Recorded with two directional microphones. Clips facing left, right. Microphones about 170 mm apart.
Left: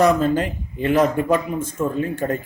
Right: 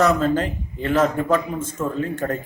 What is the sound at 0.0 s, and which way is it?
A man's voice, 15° left (ahead or behind).